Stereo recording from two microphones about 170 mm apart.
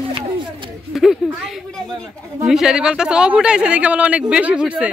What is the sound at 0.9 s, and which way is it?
Speech, centre (ahead or behind).